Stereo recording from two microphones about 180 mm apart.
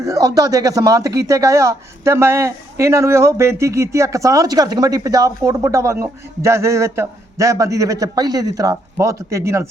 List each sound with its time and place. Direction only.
0.0 s speech: 20° right (ahead or behind)